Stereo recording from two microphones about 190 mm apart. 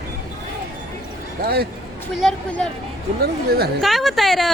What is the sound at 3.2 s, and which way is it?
Speech, 55° right (ahead or behind).